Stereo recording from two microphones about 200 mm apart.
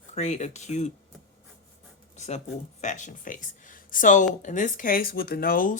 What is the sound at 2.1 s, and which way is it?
Speech, 35° left (ahead or behind).